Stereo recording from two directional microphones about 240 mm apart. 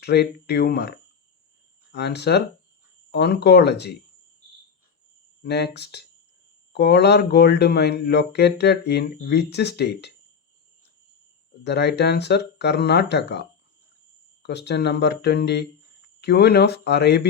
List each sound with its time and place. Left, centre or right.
0.0 s speech: left
1.9 s speech: left
5.4 s speech: left
11.6 s speech: left